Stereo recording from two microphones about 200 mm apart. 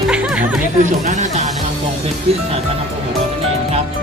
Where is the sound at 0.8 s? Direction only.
35° right (ahead or behind).